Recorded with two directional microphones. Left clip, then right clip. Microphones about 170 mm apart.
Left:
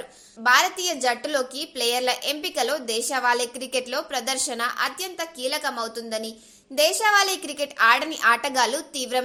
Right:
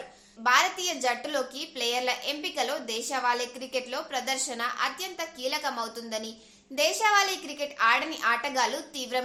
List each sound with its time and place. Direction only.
0.4 s a woman's voice: 30° left (ahead or behind)